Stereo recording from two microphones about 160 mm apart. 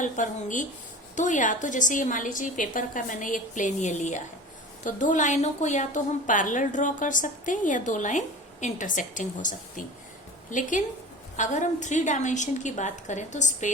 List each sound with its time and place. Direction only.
0.0 s a woman's voice: 55° left (ahead or behind)